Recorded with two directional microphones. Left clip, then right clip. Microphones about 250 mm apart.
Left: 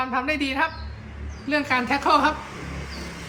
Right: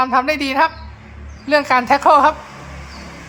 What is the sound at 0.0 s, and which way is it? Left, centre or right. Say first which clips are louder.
A woman's voice: right 8 dB; right.